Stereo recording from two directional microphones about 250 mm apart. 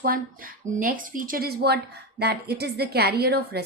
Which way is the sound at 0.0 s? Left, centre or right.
Right.